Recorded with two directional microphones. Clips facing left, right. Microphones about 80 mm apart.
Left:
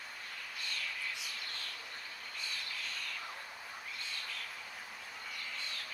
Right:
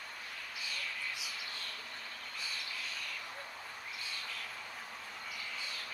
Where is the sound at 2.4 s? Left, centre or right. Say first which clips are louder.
Even; centre.